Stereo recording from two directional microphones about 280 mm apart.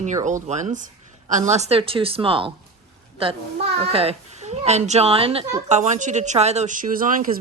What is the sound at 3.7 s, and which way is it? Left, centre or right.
Speech, right.